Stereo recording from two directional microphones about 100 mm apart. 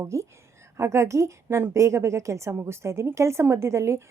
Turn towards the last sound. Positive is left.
turn(degrees=-30)  # may be behind; listen again after turning